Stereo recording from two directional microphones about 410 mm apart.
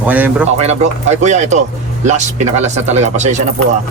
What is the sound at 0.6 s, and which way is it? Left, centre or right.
Speech, centre.